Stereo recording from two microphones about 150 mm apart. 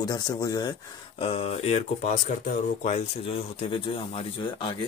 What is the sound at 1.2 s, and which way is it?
Speech, 40° left (ahead or behind).